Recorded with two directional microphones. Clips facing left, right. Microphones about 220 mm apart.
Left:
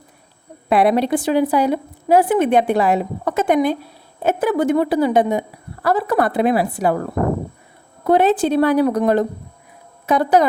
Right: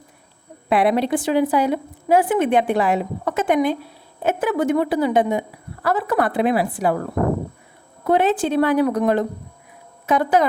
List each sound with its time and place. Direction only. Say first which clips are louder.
0.7 s a woman's voice: left 2 dB; 40° left (ahead or behind)
8.0 s a woman's voice: left 3 dB; 40° left (ahead or behind)